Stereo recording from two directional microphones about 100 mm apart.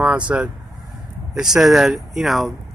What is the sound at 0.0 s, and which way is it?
Speech, 15° right (ahead or behind).